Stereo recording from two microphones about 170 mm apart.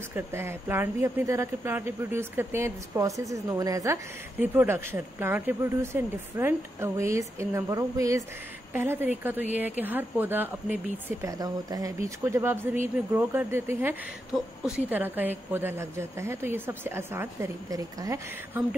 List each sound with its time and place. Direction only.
0.1 s speech: 15° right (ahead or behind)